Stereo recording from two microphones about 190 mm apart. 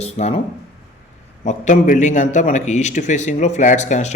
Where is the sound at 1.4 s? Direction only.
40° left (ahead or behind).